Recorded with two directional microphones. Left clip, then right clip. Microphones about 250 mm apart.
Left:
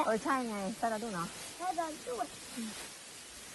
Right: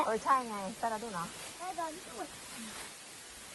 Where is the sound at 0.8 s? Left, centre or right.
Centre.